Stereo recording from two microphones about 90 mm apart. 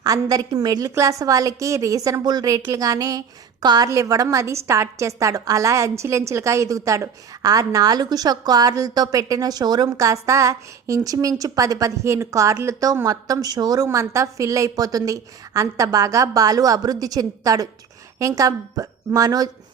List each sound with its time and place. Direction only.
0.0 s a woman's voice: 45° right (ahead or behind)